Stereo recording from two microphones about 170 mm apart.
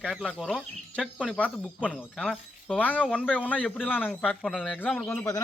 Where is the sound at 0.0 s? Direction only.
5° left (ahead or behind).